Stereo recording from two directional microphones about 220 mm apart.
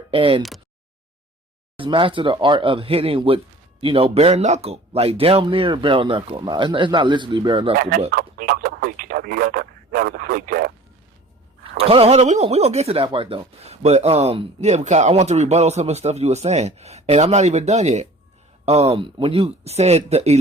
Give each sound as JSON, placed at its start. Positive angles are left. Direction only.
{"t": 0.1, "sound": "speech", "side_deg": -25}
{"t": 1.7, "sound": "speech", "side_deg": -25}
{"t": 7.8, "sound": "speech", "side_deg": -40}
{"t": 11.9, "sound": "speech", "side_deg": -25}